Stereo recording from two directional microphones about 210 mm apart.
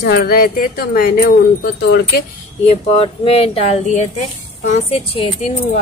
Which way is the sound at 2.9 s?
25° left (ahead or behind).